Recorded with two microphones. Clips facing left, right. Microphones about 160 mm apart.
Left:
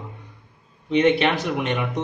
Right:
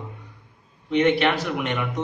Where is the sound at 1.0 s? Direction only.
20° left (ahead or behind).